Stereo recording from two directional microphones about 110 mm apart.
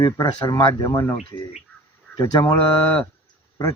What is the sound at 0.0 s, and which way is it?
Speech, 35° left (ahead or behind).